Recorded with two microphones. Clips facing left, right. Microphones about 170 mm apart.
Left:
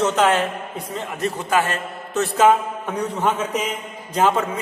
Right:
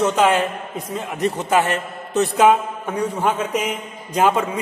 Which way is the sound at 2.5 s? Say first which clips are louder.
Right 1 dB; 5° right (ahead or behind).